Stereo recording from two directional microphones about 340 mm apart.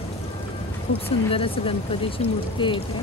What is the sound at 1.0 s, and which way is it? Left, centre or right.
Speech, centre.